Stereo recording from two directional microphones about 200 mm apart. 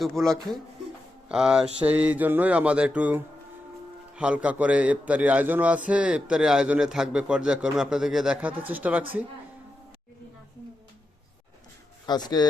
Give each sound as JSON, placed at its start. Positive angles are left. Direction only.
{"t": 0.0, "sound": "a man's voice", "side_deg": 0}
{"t": 12.0, "sound": "speech", "side_deg": 20}